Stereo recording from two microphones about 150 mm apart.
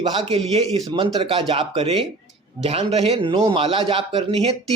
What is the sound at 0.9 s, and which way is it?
A man's voice, 35° right (ahead or behind).